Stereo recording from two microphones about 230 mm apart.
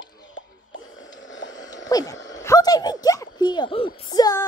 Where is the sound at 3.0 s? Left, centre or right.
Centre.